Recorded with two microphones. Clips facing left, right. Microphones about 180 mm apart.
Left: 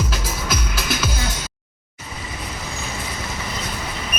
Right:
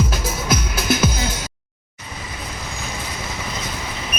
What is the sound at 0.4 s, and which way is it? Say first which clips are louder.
Music: right 6 dB; 50° right (ahead or behind).